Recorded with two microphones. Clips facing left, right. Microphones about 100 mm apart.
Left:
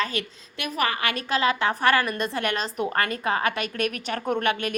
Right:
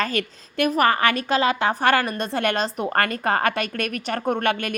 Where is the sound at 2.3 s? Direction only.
55° right (ahead or behind).